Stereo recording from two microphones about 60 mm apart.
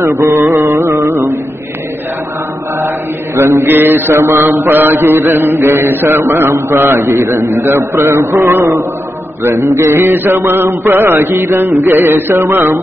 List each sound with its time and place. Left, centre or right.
0.0 s a man's voice: right
0.5 s a sound: right
3.3 s mantra: right
6.5 s a man's voice: right
9.4 s mantra: right